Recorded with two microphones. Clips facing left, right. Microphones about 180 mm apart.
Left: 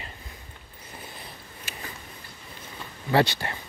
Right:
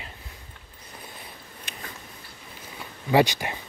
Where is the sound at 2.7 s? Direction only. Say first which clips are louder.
Right 2 dB; 15° right (ahead or behind).